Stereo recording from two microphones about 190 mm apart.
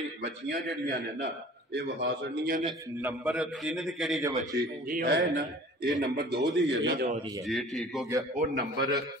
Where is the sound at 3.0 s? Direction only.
5° right (ahead or behind).